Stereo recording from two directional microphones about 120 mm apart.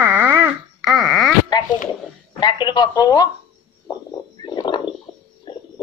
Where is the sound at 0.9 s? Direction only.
Centre (ahead or behind).